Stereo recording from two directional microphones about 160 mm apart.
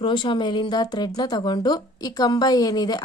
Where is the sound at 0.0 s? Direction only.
30° left (ahead or behind).